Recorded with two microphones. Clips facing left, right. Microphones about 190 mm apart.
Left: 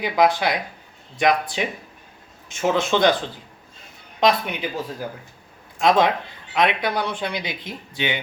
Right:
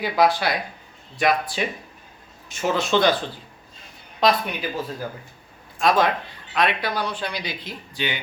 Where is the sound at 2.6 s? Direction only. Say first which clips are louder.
Left 1 dB; 20° left (ahead or behind).